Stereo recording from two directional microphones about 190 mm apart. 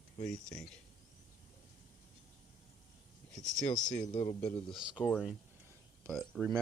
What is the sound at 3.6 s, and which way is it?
Speech, 40° left (ahead or behind).